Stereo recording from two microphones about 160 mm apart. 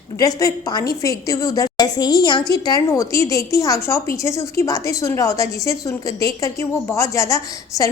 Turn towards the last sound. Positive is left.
turn(degrees=20)  # may be behind; listen again after turning